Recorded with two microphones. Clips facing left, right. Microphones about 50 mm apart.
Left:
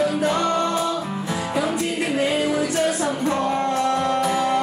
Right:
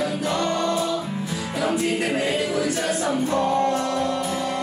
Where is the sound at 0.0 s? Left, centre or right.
Left.